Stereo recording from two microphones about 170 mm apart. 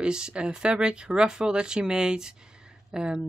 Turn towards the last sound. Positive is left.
turn(degrees=-5)  # may be behind; listen again after turning